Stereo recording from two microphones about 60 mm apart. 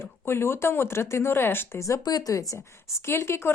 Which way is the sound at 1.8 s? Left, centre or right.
Left.